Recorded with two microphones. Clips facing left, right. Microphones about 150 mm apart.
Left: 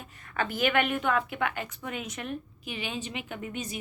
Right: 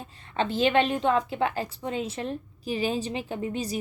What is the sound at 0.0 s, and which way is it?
A woman's voice, 25° right (ahead or behind).